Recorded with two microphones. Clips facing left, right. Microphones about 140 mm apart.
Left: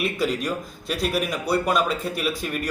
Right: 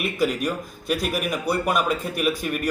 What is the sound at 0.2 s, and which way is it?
Speech, 10° right (ahead or behind).